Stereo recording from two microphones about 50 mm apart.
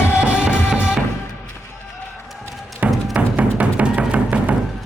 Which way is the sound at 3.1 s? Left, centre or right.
Right.